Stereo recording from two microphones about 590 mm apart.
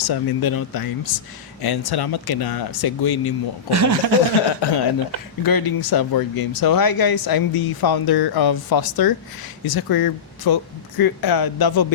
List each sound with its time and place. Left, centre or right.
0.0 s speech: left
3.7 s speech: right
4.6 s speech: left